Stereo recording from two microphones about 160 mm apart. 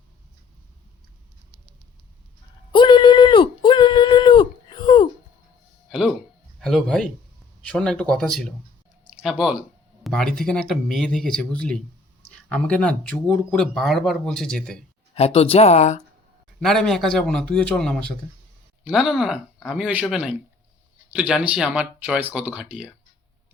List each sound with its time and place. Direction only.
2.7 s a sound: 30° left (ahead or behind)
6.6 s speech: 5° left (ahead or behind)
15.1 s speech: 40° left (ahead or behind)
16.6 s speech: centre (ahead or behind)